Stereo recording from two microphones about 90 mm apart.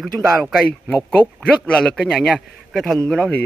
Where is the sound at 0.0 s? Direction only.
Centre (ahead or behind).